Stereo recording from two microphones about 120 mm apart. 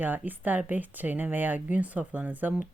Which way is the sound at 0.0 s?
15° right (ahead or behind).